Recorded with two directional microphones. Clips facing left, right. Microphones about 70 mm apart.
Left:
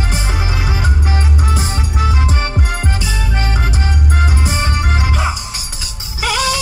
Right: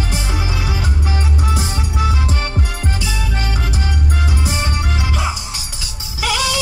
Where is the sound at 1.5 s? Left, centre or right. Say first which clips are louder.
Left 1 dB; left.